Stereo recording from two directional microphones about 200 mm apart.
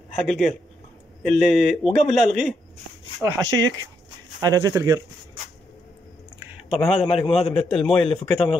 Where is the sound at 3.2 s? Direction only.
15° right (ahead or behind).